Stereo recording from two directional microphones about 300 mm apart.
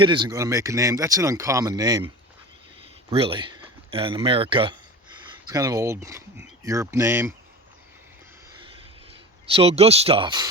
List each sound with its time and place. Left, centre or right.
0.0 s speech: centre
3.1 s speech: centre
9.5 s speech: centre